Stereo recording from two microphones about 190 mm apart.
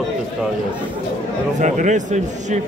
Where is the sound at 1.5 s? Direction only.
40° right (ahead or behind).